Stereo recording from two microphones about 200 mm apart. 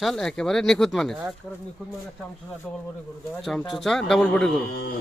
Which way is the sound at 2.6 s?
Centre (ahead or behind).